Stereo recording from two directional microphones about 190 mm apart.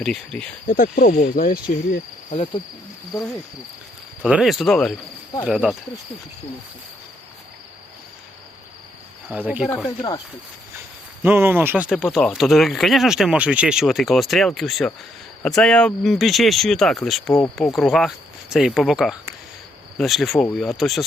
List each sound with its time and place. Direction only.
0.0 s speech: centre (ahead or behind)
0.7 s cricket: 45° left (ahead or behind)
4.2 s speech: 5° right (ahead or behind)
9.3 s speech: 5° right (ahead or behind)
9.6 s speech: 15° left (ahead or behind)
11.2 s speech: 10° right (ahead or behind)